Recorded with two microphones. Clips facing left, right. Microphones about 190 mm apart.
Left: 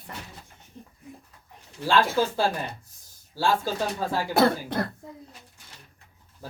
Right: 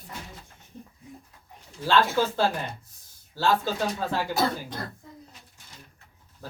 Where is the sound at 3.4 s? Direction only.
10° left (ahead or behind).